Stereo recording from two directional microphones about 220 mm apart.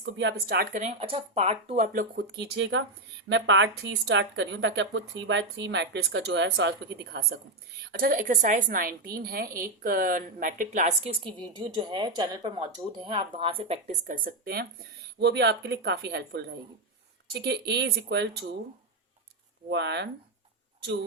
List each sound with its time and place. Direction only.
0.0 s speech: 50° right (ahead or behind)
2.6 s a woman's voice: 55° right (ahead or behind); by 14.2 s 30° right (ahead or behind)
14.3 s speech: 45° right (ahead or behind)
19.7 s speech: 50° right (ahead or behind)